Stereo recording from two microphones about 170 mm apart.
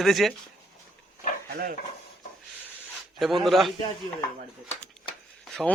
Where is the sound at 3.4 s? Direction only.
Centre (ahead or behind).